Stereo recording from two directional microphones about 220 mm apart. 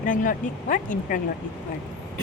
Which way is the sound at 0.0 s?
40° left (ahead or behind).